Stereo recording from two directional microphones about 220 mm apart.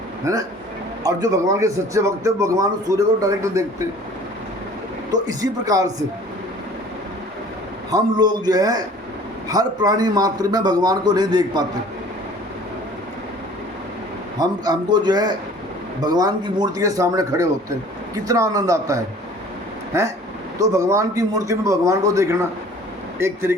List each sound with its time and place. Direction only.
0.3 s a man's voice: 15° right (ahead or behind)
5.2 s a man's voice: 15° right (ahead or behind)
7.9 s a man's voice: 20° right (ahead or behind)
14.3 s a man's voice: 20° right (ahead or behind)